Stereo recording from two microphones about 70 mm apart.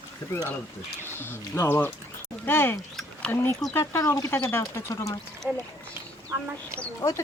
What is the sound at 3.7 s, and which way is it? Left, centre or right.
Speech, left.